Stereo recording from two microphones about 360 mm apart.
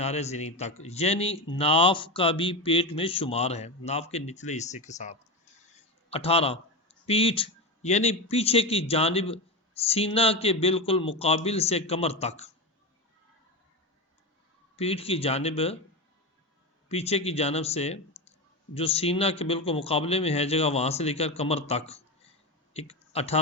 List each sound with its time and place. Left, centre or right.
0.0 s a man's voice: centre
14.8 s speech: centre
16.9 s speech: centre